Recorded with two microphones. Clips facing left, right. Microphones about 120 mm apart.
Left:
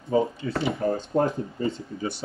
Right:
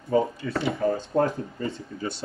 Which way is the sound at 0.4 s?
25° left (ahead or behind).